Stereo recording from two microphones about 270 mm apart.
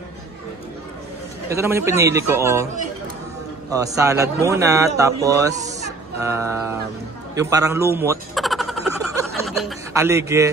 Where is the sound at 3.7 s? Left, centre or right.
Centre.